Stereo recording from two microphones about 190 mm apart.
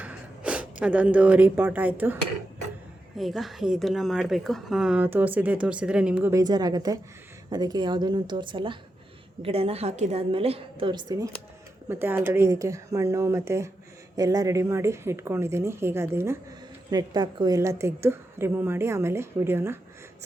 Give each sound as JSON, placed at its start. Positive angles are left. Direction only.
{"t": 0.0, "sound": "speech", "side_deg": -5}
{"t": 3.2, "sound": "a woman's voice", "side_deg": 0}